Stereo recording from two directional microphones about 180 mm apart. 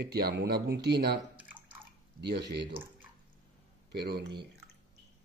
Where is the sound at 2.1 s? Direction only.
70° right (ahead or behind).